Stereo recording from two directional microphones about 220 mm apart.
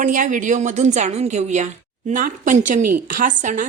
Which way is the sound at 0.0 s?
35° right (ahead or behind).